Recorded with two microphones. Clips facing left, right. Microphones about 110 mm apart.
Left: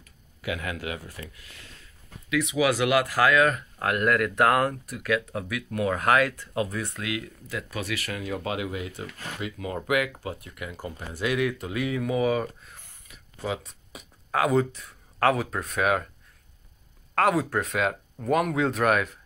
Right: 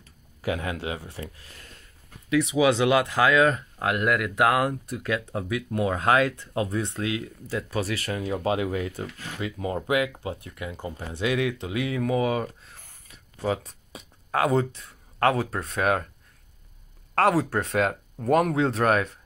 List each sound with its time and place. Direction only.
0.0 s speech: 30° right (ahead or behind); by 4.7 s 10° right (ahead or behind)
4.8 s speech: 25° right (ahead or behind)
12.8 s a sound: 35° right (ahead or behind)
13.7 s speech: 30° right (ahead or behind)
17.1 s speech: 30° right (ahead or behind)